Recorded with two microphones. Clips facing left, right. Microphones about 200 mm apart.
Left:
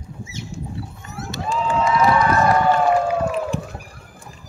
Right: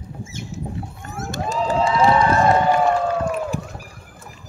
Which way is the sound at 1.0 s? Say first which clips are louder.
Right 2 dB; 50° right (ahead or behind).